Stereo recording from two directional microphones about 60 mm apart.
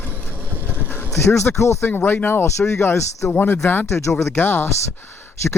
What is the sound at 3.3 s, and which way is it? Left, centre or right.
Speech, left.